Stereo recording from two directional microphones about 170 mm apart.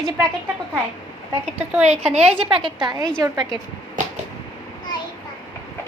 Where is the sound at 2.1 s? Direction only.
40° right (ahead or behind).